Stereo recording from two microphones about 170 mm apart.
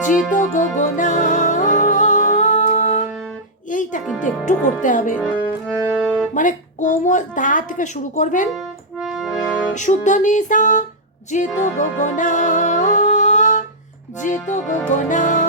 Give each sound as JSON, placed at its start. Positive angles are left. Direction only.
{"t": 0.0, "sound": "music", "side_deg": 50}
{"t": 4.4, "sound": "a woman's voice", "side_deg": 45}
{"t": 5.2, "sound": "speech", "side_deg": 5}
{"t": 6.3, "sound": "a woman's voice", "side_deg": 50}
{"t": 8.4, "sound": "music", "side_deg": -5}
{"t": 9.7, "sound": "a woman's voice", "side_deg": 45}
{"t": 11.3, "sound": "music", "side_deg": 45}
{"t": 14.4, "sound": "a woman's voice", "side_deg": 45}